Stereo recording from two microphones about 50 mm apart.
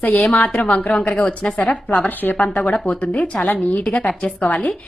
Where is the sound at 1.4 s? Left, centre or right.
Centre.